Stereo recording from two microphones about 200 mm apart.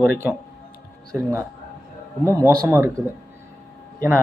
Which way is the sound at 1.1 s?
10° right (ahead or behind).